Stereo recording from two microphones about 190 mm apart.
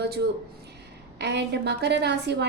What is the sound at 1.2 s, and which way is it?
A woman's voice, 60° right (ahead or behind).